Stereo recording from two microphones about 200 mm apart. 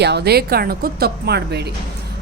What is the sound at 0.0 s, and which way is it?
A woman's voice, 55° right (ahead or behind).